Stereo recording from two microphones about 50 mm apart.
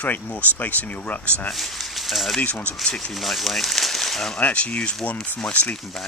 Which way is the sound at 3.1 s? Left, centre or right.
Centre.